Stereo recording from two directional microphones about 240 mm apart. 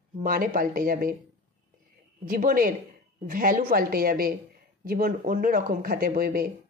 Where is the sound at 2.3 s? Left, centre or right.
Right.